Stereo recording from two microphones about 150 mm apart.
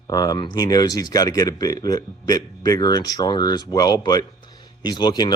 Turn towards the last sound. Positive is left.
turn(degrees=30)  # may be behind; listen again after turning